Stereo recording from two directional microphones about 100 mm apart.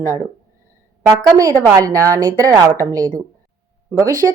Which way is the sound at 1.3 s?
35° right (ahead or behind).